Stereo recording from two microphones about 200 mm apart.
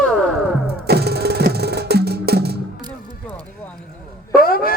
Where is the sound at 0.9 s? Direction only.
55° right (ahead or behind).